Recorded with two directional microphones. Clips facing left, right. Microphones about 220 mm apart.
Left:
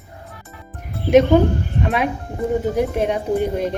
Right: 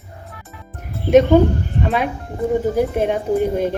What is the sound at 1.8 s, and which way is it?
Speech, centre (ahead or behind).